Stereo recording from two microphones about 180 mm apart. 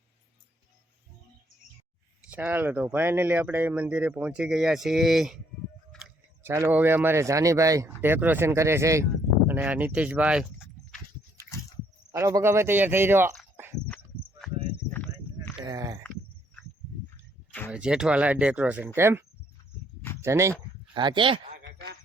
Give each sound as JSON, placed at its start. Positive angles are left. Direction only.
{"t": 2.3, "sound": "speech", "side_deg": -10}
{"t": 6.4, "sound": "speech", "side_deg": -15}
{"t": 12.1, "sound": "speech", "side_deg": -15}
{"t": 13.8, "sound": "a sound", "side_deg": 5}
{"t": 15.6, "sound": "a sound", "side_deg": -20}
{"t": 17.7, "sound": "speech", "side_deg": -5}
{"t": 20.2, "sound": "speech", "side_deg": -15}
{"t": 20.9, "sound": "speech", "side_deg": -25}
{"t": 21.6, "sound": "a sound", "side_deg": -70}